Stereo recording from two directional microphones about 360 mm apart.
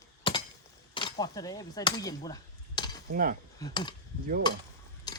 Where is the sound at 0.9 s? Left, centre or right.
Centre.